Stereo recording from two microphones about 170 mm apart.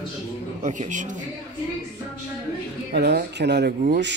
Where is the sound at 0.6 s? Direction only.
45° right (ahead or behind).